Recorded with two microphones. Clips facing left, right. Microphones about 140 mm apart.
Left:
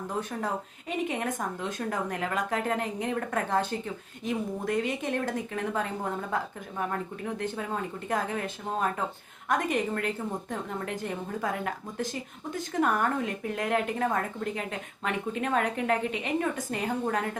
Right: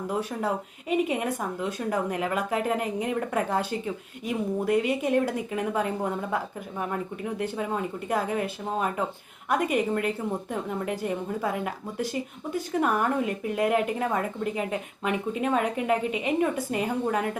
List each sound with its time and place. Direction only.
0.1 s speech: 10° right (ahead or behind)
7.3 s speech: 10° right (ahead or behind)